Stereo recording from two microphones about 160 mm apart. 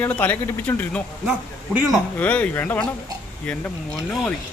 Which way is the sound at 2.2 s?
10° left (ahead or behind).